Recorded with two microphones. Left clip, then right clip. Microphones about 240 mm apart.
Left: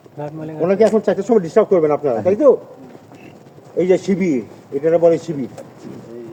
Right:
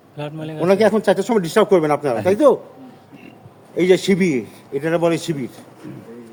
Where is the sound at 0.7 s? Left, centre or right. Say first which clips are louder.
Even; right.